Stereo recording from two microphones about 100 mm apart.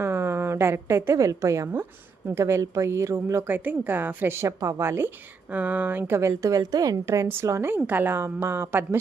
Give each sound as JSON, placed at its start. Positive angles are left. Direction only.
{"t": 0.0, "sound": "a woman's voice", "side_deg": -25}